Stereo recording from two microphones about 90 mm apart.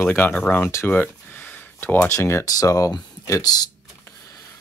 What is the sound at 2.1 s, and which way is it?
Speech, 30° left (ahead or behind).